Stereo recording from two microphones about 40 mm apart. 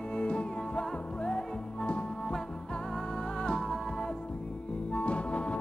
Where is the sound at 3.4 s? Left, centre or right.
Centre.